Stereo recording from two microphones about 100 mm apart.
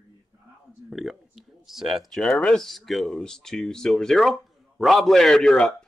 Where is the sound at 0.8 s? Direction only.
5° right (ahead or behind).